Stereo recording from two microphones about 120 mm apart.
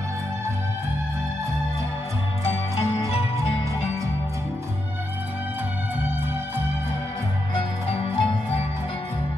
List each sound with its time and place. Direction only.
2.7 s music: 55° left (ahead or behind)
7.9 s music: 50° left (ahead or behind)